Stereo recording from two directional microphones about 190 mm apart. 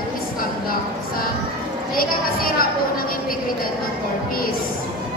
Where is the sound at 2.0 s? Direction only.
50° left (ahead or behind).